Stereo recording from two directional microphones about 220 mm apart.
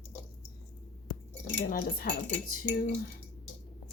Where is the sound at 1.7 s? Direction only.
40° left (ahead or behind).